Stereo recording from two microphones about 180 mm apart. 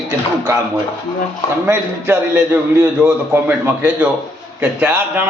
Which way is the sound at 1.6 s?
10° right (ahead or behind).